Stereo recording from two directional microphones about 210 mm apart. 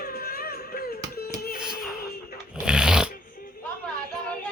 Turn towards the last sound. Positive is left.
turn(degrees=-5)  # may be behind; listen again after turning